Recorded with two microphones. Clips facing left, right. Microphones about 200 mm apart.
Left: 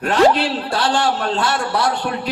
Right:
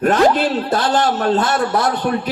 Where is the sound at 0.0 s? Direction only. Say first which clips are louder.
Right 1 dB; 50° right (ahead or behind).